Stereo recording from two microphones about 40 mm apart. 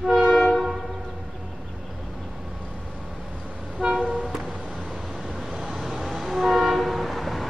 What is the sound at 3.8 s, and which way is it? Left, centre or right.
Toot, right.